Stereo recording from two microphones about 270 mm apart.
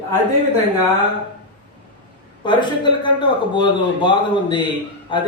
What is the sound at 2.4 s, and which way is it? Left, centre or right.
Speech, centre.